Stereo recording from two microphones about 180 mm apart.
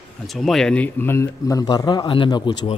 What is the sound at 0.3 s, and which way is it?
A man's voice, centre (ahead or behind).